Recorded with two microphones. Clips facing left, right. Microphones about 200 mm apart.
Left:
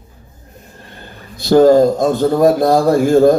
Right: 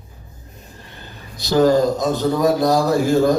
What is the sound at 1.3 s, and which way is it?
A man's voice, 50° left (ahead or behind).